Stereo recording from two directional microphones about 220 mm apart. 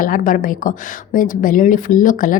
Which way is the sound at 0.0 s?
40° left (ahead or behind).